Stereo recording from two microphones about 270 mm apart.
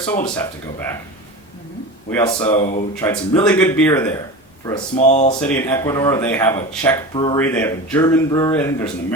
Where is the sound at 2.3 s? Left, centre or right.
Centre.